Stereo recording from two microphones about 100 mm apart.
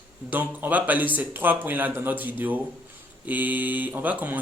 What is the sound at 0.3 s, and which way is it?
Speech, 20° right (ahead or behind).